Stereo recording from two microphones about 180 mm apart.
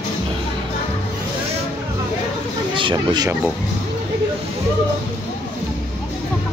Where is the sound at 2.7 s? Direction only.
25° right (ahead or behind).